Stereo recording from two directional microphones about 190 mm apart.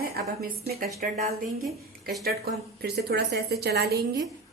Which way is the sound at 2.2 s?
55° right (ahead or behind).